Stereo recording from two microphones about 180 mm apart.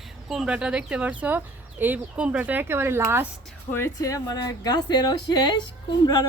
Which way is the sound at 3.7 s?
15° left (ahead or behind).